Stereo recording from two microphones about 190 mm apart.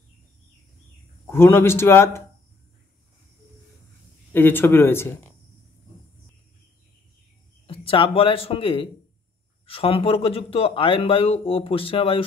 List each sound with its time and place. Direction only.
1.2 s a man's voice: 10° left (ahead or behind)
4.3 s a man's voice: 10° left (ahead or behind)
7.6 s speech: 30° left (ahead or behind)